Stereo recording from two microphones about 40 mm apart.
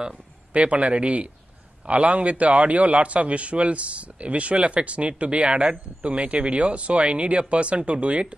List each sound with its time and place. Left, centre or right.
0.5 s a man's voice: right